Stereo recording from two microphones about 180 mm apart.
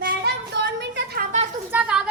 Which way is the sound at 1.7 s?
5° right (ahead or behind).